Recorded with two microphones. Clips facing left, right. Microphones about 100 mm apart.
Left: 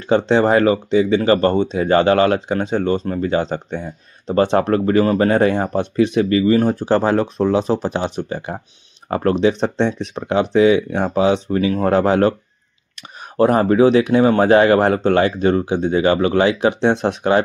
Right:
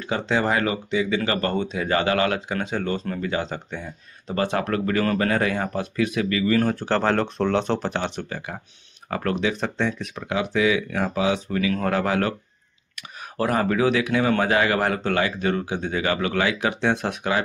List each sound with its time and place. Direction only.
0.0 s speech: 30° left (ahead or behind); by 8.3 s 15° left (ahead or behind)
8.3 s speech: 30° left (ahead or behind)
13.4 s speech: 30° left (ahead or behind)